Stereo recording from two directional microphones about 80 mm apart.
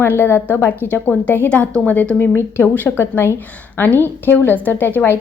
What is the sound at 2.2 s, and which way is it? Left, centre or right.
A woman's voice, left.